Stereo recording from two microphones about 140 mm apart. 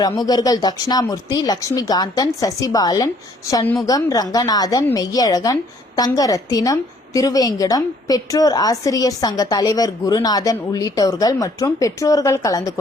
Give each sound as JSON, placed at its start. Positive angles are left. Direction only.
{"t": 0.0, "sound": "a woman's voice", "side_deg": 30}